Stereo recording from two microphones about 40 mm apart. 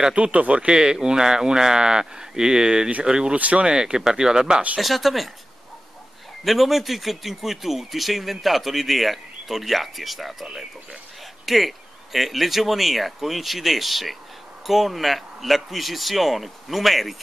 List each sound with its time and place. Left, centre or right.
0.1 s speech: right
0.7 s speech: centre
3.3 s speech: right
3.6 s speech: centre
4.7 s speech: centre
6.4 s speech: centre